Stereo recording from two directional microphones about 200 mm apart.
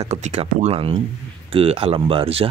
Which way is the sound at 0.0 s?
35° right (ahead or behind).